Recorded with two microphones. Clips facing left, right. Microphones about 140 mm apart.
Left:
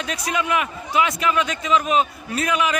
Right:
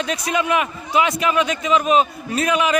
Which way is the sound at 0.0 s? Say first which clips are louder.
Right 3 dB; 25° right (ahead or behind).